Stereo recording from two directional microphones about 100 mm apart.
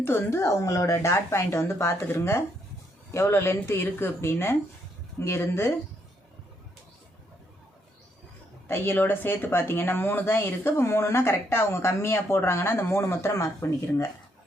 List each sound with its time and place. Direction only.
0.0 s speech: 25° left (ahead or behind)
8.6 s speech: 25° left (ahead or behind)